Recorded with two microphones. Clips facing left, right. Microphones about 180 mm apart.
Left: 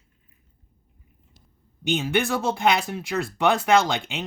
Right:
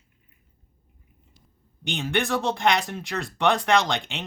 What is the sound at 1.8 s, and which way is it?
Speech, 5° left (ahead or behind).